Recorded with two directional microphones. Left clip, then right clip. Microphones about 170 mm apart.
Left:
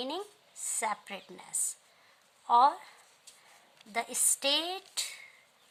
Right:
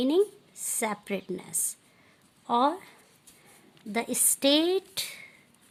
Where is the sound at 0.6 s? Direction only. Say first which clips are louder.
Right 2 dB; 25° right (ahead or behind).